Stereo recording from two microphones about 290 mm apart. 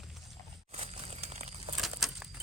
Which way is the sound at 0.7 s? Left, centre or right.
Right.